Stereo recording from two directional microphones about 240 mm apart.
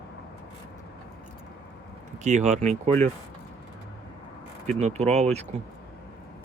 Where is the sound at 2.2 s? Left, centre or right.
Right.